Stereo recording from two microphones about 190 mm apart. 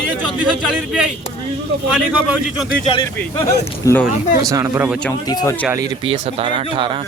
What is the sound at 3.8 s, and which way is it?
Speech, 20° left (ahead or behind).